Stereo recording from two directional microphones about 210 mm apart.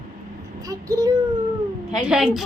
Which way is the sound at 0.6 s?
15° right (ahead or behind).